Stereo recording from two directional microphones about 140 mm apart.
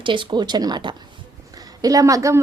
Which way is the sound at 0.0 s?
35° right (ahead or behind).